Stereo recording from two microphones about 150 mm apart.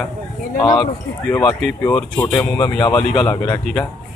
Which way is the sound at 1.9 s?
15° left (ahead or behind).